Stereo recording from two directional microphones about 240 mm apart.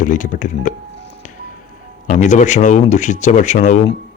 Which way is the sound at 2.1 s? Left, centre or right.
Left.